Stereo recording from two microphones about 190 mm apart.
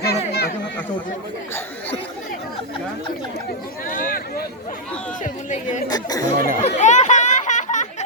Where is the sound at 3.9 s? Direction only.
45° left (ahead or behind).